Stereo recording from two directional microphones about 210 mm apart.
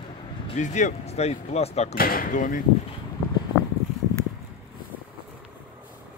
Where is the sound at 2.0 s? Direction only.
45° left (ahead or behind).